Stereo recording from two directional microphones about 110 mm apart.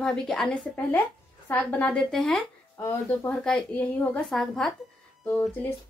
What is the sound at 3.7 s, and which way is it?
Speech, 15° left (ahead or behind).